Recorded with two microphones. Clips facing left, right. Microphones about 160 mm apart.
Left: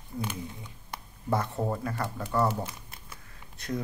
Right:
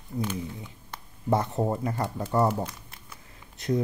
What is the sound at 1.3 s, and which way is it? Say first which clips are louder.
Speech: right 4 dB; 20° right (ahead or behind).